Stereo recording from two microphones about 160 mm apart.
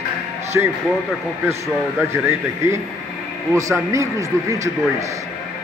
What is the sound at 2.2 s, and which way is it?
A man's voice, 20° right (ahead or behind).